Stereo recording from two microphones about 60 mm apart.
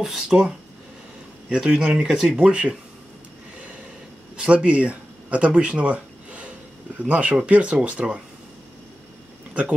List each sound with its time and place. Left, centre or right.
0.0 s speech: centre
1.5 s speech: centre
4.4 s speech: centre
9.5 s speech: right